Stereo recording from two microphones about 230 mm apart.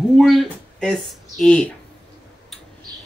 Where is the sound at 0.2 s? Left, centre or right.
Centre.